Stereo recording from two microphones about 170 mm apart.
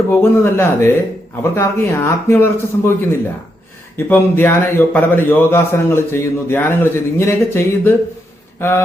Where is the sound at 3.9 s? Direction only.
15° left (ahead or behind).